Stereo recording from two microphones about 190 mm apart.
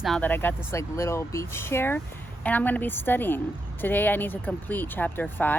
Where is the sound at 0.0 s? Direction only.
5° left (ahead or behind).